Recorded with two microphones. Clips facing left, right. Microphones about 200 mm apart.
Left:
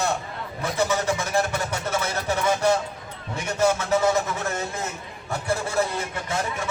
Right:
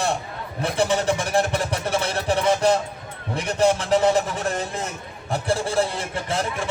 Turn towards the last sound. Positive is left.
turn(degrees=-30)  # may be behind; listen again after turning